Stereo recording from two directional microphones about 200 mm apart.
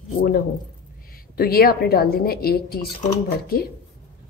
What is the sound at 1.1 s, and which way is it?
A woman's voice, 50° left (ahead or behind).